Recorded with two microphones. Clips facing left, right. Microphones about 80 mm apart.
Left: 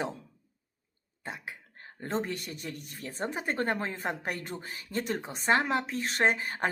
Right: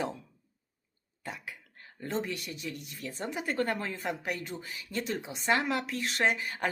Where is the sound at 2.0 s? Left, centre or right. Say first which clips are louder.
Left 1 dB; left.